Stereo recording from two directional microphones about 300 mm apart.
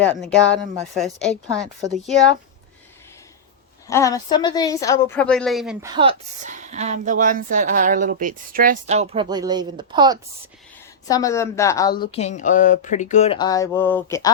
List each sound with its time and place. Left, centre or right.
0.0 s a woman's voice: centre
3.8 s speech: centre
5.9 s a woman's voice: centre
11.1 s speech: centre